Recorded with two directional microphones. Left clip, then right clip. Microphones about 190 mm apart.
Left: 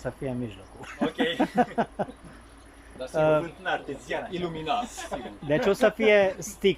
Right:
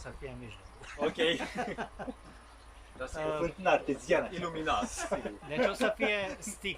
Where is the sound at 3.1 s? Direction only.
45° left (ahead or behind).